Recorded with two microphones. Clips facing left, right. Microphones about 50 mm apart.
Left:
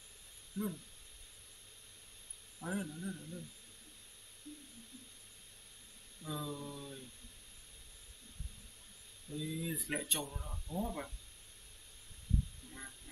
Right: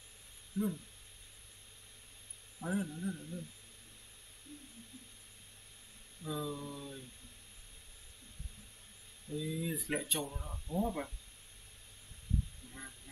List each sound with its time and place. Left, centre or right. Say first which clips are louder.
0.5 s speech: right 4 dB; centre
2.6 s speech: right 3 dB; centre
6.2 s mantra: right 3 dB; centre
9.3 s speech: right 2 dB; centre